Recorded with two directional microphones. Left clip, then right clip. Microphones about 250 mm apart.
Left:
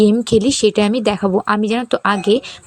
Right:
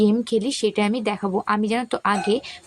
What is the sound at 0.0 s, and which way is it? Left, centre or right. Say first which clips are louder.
Speech: left 7 dB; left.